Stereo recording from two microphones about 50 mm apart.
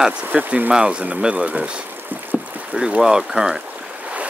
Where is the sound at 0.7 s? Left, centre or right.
Centre.